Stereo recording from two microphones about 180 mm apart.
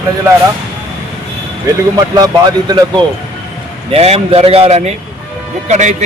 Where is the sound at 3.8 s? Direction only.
35° right (ahead or behind).